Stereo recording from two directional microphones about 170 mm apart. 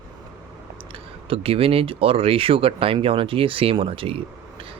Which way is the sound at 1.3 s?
35° right (ahead or behind).